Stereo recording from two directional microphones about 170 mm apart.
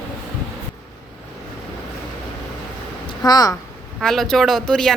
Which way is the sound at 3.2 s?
20° left (ahead or behind).